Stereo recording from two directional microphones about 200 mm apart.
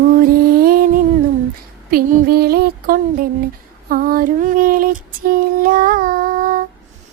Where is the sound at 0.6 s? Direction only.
45° right (ahead or behind).